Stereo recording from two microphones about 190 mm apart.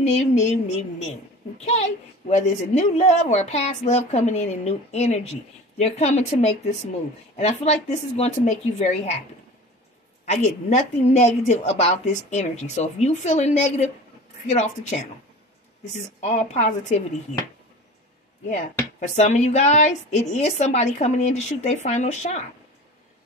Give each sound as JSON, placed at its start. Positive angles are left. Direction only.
{"t": 0.0, "sound": "speech", "side_deg": 35}
{"t": 10.2, "sound": "speech", "side_deg": 35}
{"t": 18.5, "sound": "speech", "side_deg": 40}